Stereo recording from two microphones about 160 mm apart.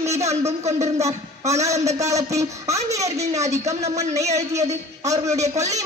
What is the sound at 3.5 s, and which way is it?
Speech, 45° right (ahead or behind).